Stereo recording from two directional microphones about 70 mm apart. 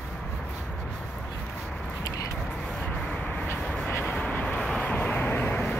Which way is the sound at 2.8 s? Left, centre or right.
Centre.